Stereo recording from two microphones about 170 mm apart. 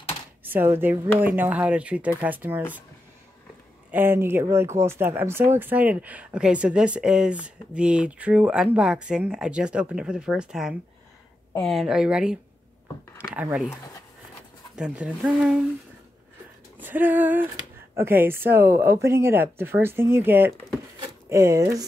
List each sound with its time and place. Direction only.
0.4 s speech: 10° right (ahead or behind)
3.9 s speech: 10° right (ahead or behind)
14.8 s speech: 5° right (ahead or behind)
16.7 s a sound: 10° right (ahead or behind)
17.9 s speech: 15° right (ahead or behind)